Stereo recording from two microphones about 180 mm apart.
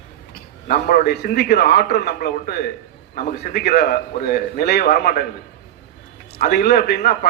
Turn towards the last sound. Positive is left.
turn(degrees=60)  # may be behind; listen again after turning